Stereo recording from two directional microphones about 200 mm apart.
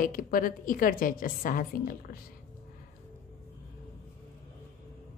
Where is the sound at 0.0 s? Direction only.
45° left (ahead or behind).